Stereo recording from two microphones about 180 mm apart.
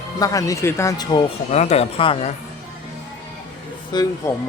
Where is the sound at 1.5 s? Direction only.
35° left (ahead or behind).